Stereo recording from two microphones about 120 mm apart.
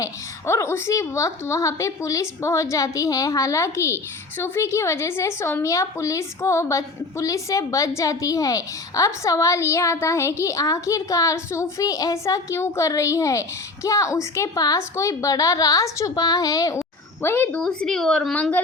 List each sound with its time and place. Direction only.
0.0 s a woman's voice: 25° left (ahead or behind)
17.2 s a woman's voice: 15° left (ahead or behind)
17.6 s speech: 5° left (ahead or behind)